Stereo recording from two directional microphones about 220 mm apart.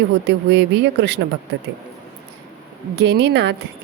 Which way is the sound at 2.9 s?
50° right (ahead or behind).